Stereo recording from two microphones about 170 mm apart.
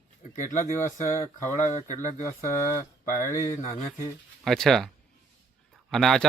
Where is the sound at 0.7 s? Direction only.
45° left (ahead or behind).